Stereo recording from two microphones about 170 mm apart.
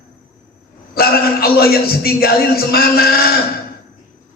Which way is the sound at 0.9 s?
65° left (ahead or behind).